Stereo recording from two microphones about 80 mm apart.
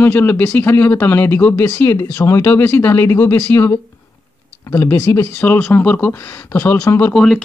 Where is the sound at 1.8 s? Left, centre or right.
Left.